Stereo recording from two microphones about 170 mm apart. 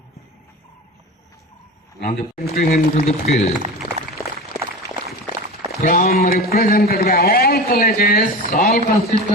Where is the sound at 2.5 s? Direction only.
60° left (ahead or behind).